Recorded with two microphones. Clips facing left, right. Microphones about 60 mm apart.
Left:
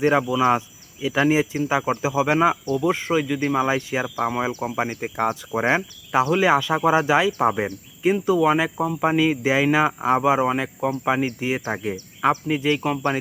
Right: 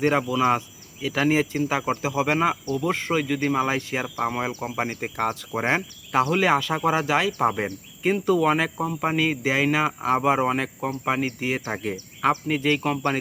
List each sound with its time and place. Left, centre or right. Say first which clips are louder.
0.0 s speech: left 3 dB; centre
2.8 s speech: left 3 dB; centre
10.2 s speech: left 1 dB; centre